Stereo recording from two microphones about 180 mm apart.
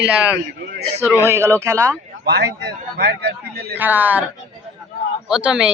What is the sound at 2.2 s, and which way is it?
A man's voice, 65° right (ahead or behind).